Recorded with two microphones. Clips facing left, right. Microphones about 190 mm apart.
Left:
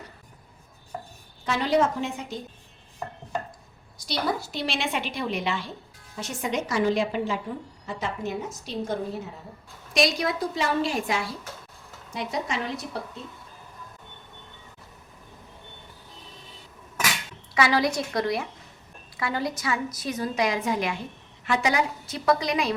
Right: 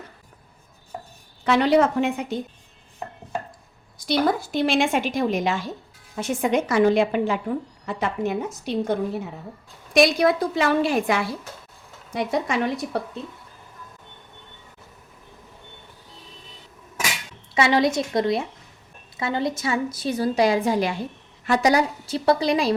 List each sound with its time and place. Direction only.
0.9 s music: 20° right (ahead or behind)
1.5 s a woman's voice: 65° right (ahead or behind)
4.0 s a woman's voice: 50° right (ahead or behind)
17.5 s a woman's voice: 25° right (ahead or behind)